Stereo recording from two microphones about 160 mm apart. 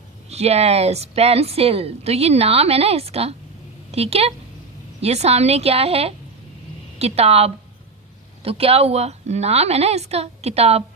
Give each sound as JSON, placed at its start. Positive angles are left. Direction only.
{"t": 0.3, "sound": "a woman's voice", "side_deg": -40}